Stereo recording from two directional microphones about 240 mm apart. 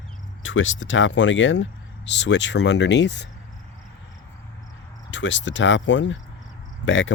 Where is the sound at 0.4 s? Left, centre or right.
Left.